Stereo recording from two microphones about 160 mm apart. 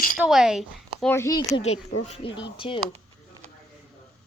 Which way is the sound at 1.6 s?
40° left (ahead or behind).